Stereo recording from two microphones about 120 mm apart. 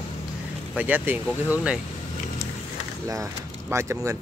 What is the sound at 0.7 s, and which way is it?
Speech, 15° right (ahead or behind).